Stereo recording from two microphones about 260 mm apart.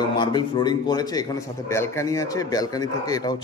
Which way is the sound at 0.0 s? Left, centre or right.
Centre.